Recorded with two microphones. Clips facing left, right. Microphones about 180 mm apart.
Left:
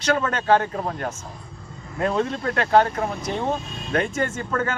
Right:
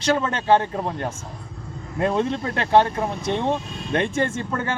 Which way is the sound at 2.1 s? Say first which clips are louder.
Even; 20° right (ahead or behind).